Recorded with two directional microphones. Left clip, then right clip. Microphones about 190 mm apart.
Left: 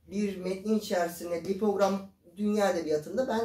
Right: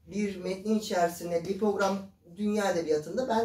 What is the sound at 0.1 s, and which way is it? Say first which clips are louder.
Speech: even; 15° left (ahead or behind).